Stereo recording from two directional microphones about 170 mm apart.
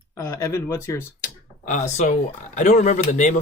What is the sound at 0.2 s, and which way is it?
Speech, 15° left (ahead or behind).